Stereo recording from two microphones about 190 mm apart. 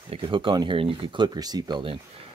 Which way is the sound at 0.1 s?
25° right (ahead or behind).